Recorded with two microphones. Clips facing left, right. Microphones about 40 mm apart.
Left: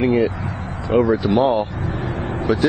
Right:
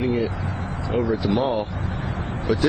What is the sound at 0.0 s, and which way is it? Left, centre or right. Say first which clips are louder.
Speech: left 6 dB; left.